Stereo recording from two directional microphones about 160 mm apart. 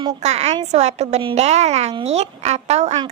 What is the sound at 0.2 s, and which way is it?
A woman's voice, 45° right (ahead or behind).